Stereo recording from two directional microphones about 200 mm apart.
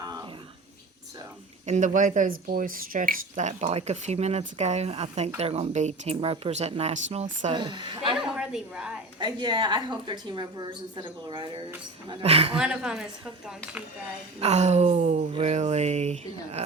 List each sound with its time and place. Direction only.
1.6 s speech: 35° right (ahead or behind)
7.5 s a woman's voice: 20° right (ahead or behind)
8.1 s a woman's voice: 5° right (ahead or behind)
9.1 s a woman's voice: 20° right (ahead or behind)
12.5 s a woman's voice: 5° right (ahead or behind)
14.3 s speech: 35° right (ahead or behind)